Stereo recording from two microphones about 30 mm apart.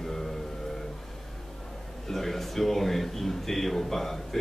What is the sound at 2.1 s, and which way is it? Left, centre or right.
Speech, centre.